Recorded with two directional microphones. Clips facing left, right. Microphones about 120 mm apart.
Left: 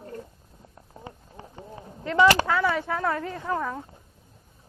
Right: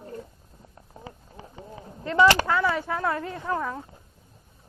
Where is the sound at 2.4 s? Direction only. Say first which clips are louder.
Even; centre (ahead or behind).